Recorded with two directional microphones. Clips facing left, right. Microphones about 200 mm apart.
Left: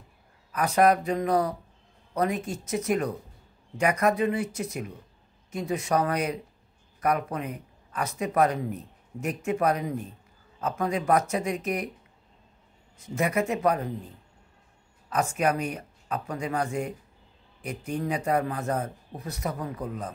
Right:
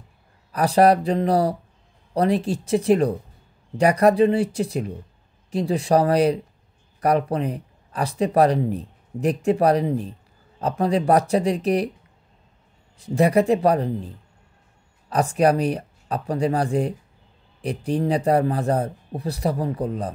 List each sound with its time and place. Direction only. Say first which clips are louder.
0.5 s speech: right 5 dB; 35° right (ahead or behind)
12.9 s speech: right 9 dB; 35° right (ahead or behind)
15.0 s speech: right 7 dB; 35° right (ahead or behind)